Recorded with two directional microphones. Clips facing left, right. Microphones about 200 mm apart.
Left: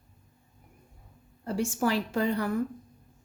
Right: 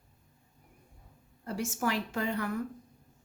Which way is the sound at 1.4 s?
30° left (ahead or behind).